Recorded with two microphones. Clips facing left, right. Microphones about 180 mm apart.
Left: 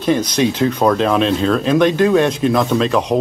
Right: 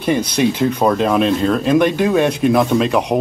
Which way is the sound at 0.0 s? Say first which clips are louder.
Even; 10° right (ahead or behind).